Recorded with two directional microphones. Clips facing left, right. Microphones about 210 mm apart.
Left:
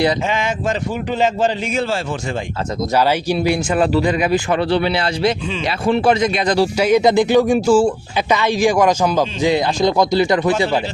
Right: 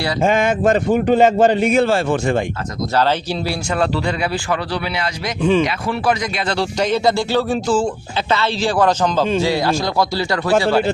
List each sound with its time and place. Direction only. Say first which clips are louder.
0.2 s a man's voice: right 5 dB; 50° right (ahead or behind)
2.9 s speech: left 1 dB; 10° left (ahead or behind)